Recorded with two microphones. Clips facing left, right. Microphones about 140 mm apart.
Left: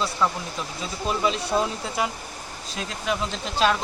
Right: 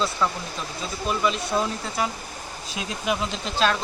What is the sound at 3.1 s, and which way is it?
Speech, 15° right (ahead or behind).